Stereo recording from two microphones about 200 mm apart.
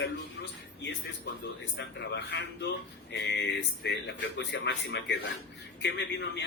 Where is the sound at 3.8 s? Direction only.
60° left (ahead or behind).